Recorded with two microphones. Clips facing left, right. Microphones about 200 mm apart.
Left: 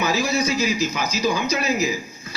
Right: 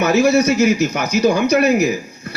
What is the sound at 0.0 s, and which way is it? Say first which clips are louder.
A man's voice: right 8 dB; 70° right (ahead or behind).